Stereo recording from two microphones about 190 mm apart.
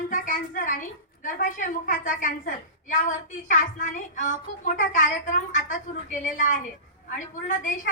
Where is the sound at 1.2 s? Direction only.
45° left (ahead or behind).